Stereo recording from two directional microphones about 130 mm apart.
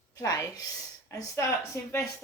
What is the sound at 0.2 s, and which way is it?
A woman's voice, 25° left (ahead or behind).